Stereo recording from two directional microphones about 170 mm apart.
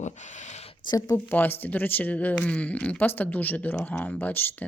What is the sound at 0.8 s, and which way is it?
Speech, 25° left (ahead or behind).